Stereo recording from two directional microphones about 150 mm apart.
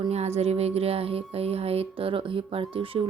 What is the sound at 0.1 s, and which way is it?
Speech, 45° right (ahead or behind).